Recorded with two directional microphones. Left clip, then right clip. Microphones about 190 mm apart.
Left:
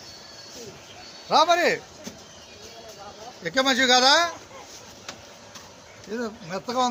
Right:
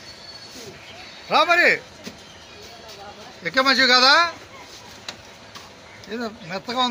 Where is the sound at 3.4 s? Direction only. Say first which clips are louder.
Right 4 dB; 15° left (ahead or behind).